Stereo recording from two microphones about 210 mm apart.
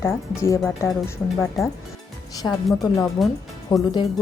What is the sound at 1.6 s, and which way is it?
Speech, centre (ahead or behind).